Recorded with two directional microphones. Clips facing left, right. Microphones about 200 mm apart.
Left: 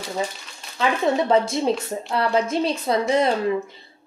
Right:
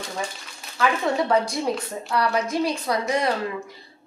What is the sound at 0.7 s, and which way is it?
A woman's voice, 25° left (ahead or behind).